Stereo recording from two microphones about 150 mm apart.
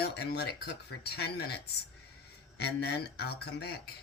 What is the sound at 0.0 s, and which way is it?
Speech, 90° left.